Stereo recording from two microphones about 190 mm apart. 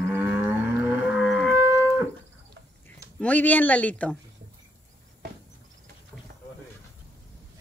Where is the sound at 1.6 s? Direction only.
10° right (ahead or behind).